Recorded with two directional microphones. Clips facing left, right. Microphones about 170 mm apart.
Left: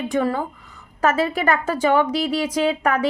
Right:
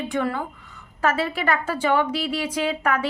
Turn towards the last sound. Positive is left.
turn(degrees=40)  # may be behind; listen again after turning